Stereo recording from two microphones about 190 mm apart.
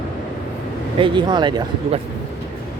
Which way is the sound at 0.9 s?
25° right (ahead or behind).